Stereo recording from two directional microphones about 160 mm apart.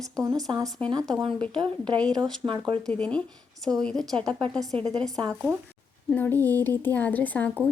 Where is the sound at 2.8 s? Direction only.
5° left (ahead or behind).